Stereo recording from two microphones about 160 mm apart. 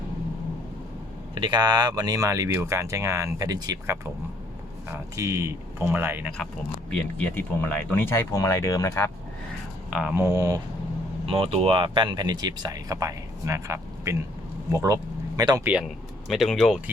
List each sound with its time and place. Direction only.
1.4 s speech: 25° right (ahead or behind); by 6.3 s 10° right (ahead or behind)
6.9 s speech: 10° left (ahead or behind)
9.9 s speech: 5° right (ahead or behind)
10.2 s speech: 20° right (ahead or behind)
11.3 s speech: 35° right (ahead or behind)
15.6 s speech: 5° right (ahead or behind)